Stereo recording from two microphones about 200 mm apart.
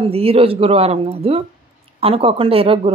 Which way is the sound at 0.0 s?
30° right (ahead or behind).